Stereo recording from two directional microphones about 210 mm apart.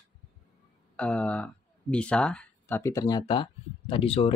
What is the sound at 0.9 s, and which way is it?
Speech, 5° left (ahead or behind).